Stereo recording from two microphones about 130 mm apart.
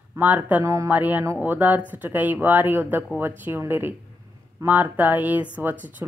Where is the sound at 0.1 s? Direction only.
15° right (ahead or behind).